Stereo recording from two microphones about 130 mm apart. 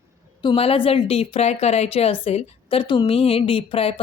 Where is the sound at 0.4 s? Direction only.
50° left (ahead or behind).